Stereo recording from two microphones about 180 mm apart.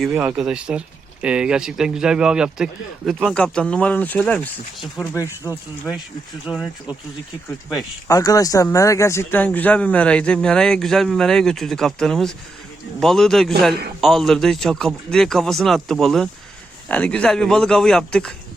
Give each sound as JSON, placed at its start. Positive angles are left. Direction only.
{"t": 0.1, "sound": "speech", "side_deg": -10}
{"t": 6.4, "sound": "speech", "side_deg": -5}
{"t": 8.0, "sound": "speech", "side_deg": 20}